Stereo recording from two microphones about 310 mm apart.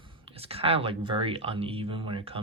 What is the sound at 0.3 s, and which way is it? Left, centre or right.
Speech, centre.